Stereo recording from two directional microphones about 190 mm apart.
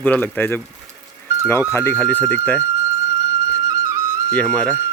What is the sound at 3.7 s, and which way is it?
Flute, 15° right (ahead or behind).